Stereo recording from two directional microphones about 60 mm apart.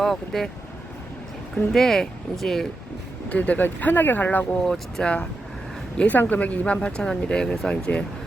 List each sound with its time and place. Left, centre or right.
0.0 s speech: centre
1.7 s speech: centre
3.2 s speech: left
4.5 s speech: centre
6.0 s speech: left; by 7.8 s centre